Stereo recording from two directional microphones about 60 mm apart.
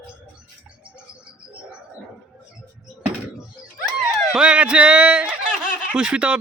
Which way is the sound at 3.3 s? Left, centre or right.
Centre.